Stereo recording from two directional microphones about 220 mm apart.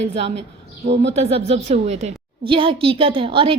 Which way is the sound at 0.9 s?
30° right (ahead or behind).